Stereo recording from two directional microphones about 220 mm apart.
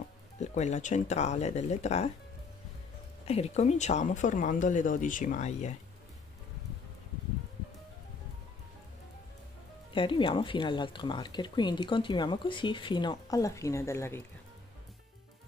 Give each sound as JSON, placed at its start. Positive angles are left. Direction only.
{"t": 0.4, "sound": "speech", "side_deg": 30}
{"t": 3.3, "sound": "speech", "side_deg": 30}
{"t": 9.9, "sound": "speech", "side_deg": 20}